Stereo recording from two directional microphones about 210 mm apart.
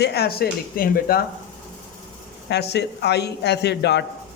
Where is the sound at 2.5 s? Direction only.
55° left (ahead or behind).